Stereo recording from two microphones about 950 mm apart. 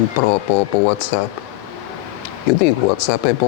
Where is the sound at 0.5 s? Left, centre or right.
Left.